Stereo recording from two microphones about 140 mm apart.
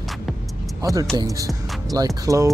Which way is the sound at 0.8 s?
25° right (ahead or behind).